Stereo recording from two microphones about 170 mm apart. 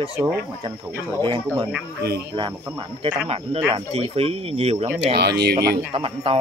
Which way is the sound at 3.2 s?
35° right (ahead or behind).